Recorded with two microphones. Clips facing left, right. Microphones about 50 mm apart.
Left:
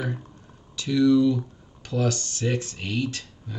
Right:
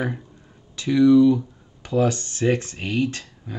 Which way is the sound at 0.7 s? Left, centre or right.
Right.